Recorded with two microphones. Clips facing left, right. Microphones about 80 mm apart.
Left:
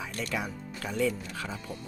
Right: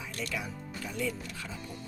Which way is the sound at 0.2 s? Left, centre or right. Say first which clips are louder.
Left 3 dB; left.